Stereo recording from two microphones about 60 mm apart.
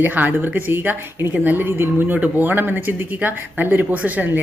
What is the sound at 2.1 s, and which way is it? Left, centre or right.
Speech, right.